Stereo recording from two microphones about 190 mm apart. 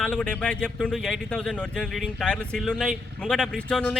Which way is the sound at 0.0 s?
5° left (ahead or behind).